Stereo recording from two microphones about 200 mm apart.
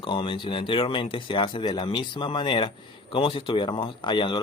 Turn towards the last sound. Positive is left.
turn(degrees=20)  # may be behind; listen again after turning